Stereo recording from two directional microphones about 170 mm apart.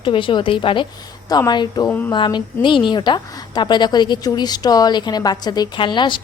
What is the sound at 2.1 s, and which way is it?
A woman's voice, 30° left (ahead or behind).